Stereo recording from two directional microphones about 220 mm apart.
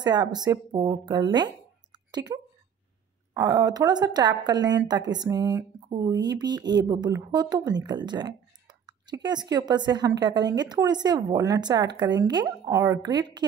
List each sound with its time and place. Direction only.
0.0 s speech: 20° right (ahead or behind)